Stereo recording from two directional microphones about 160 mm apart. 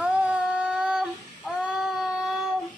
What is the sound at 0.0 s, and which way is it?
Child singing, 5° right (ahead or behind).